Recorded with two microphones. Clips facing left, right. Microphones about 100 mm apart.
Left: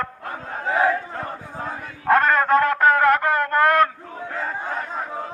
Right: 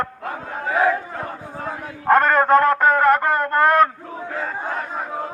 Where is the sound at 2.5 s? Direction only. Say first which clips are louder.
Even; centre (ahead or behind).